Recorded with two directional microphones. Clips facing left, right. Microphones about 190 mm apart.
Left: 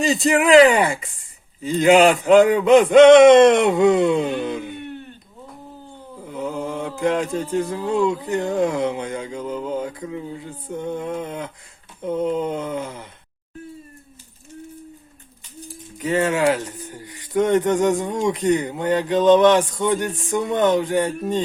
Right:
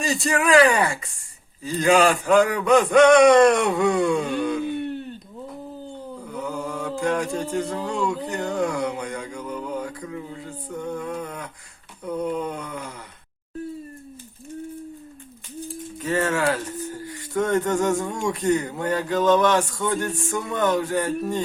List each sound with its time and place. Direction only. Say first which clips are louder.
0.0 s speech: left 5 dB; 20° left (ahead or behind)
6.2 s chant: left 4 dB; 20° left (ahead or behind)
7.5 s speech: left 4 dB; 20° left (ahead or behind)
16.0 s speech: left 4 dB; 20° left (ahead or behind)